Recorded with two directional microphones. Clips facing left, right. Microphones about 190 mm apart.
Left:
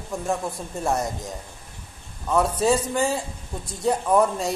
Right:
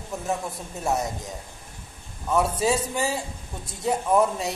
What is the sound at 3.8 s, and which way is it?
Speech, centre (ahead or behind).